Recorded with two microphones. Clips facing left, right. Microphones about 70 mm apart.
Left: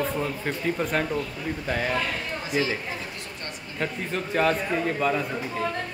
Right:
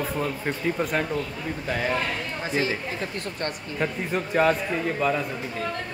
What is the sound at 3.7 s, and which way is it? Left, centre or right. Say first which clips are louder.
A man's voice: right 1 dB; centre.